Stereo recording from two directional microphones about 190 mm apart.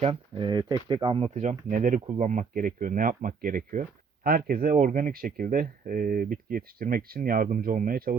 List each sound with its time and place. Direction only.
0.0 s speech: 30° right (ahead or behind); by 8.1 s 50° right (ahead or behind)